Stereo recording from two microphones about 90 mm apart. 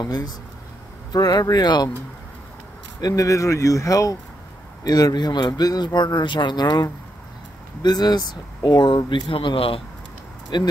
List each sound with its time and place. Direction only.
0.0 s speech: 50° left (ahead or behind)
3.0 s speech: 40° left (ahead or behind); by 9.8 s 75° left (ahead or behind)
10.5 s speech: 55° left (ahead or behind)